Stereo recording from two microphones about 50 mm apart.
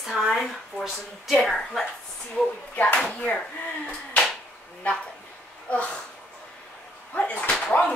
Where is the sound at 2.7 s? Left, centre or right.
Left.